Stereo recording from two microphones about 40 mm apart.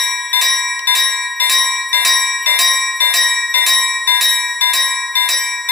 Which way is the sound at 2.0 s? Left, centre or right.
Centre.